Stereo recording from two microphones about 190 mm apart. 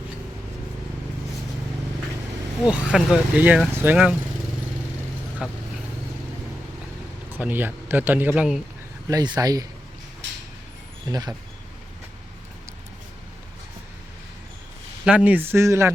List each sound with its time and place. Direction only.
2.6 s speech: 5° right (ahead or behind)
5.4 s speech: 5° right (ahead or behind)
7.3 s a man's voice: 10° right (ahead or behind)
9.0 s speech: 20° right (ahead or behind)
11.1 s speech: 20° right (ahead or behind)
15.0 s a man's voice: 5° right (ahead or behind)